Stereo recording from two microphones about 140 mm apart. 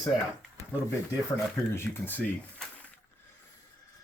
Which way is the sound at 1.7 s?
15° left (ahead or behind).